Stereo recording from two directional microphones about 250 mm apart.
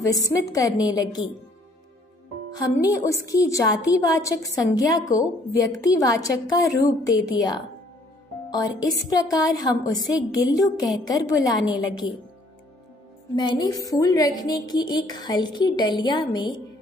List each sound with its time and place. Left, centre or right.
0.0 s a woman's voice: centre
2.9 s a woman's voice: centre
13.4 s a woman's voice: centre